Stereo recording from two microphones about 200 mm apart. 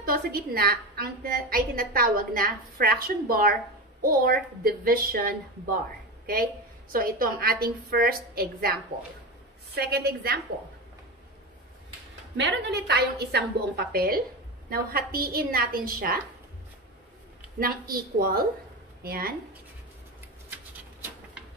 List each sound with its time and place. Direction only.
0.0 s a woman's voice: 50° right (ahead or behind)
9.8 s a woman's voice: 50° right (ahead or behind)
12.4 s a woman's voice: 60° right (ahead or behind)
17.6 s a woman's voice: 45° right (ahead or behind)